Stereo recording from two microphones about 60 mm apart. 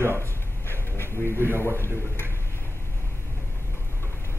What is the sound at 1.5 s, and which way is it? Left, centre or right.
Speech, right.